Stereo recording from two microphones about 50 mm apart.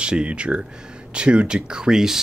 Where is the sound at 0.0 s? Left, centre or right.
Right.